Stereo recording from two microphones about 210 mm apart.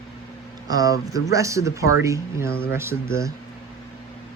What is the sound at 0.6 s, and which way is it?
Speech, 15° right (ahead or behind).